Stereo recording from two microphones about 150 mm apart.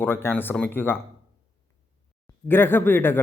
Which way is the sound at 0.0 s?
15° left (ahead or behind).